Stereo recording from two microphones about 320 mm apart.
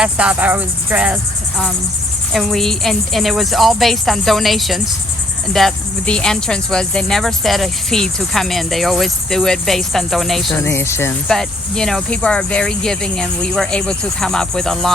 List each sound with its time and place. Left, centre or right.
0.0 s speech: centre